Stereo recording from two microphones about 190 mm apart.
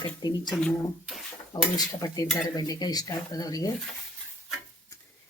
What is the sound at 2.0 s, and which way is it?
Speech, 20° left (ahead or behind).